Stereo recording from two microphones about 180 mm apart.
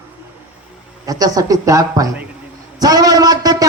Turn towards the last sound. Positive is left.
turn(degrees=-20)  # may be behind; listen again after turning